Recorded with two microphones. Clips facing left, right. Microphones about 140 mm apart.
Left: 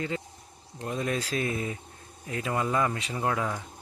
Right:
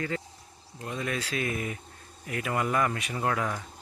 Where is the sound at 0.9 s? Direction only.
40° left (ahead or behind).